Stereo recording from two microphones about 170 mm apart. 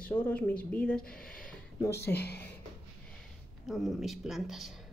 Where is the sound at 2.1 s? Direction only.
70° left (ahead or behind).